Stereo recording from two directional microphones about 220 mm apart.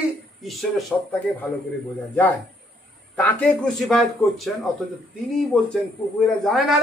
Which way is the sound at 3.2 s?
5° left (ahead or behind).